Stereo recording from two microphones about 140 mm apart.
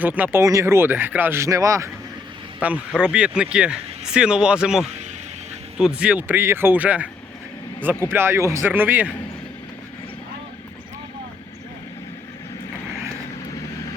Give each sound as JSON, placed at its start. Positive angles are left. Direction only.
{"t": 0.0, "sound": "speech", "side_deg": -10}
{"t": 2.6, "sound": "speech", "side_deg": -10}